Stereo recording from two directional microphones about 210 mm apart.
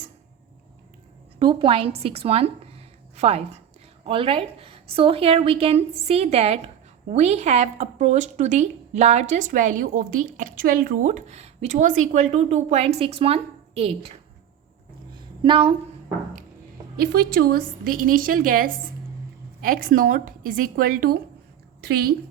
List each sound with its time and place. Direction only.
1.4 s a woman's voice: 25° right (ahead or behind)
15.4 s a woman's voice: 25° right (ahead or behind)
17.0 s a woman's voice: 50° right (ahead or behind)